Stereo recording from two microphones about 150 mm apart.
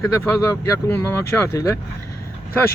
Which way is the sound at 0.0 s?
15° left (ahead or behind).